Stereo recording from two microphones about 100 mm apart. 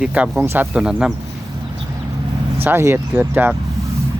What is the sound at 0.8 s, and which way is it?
Speech, 5° right (ahead or behind).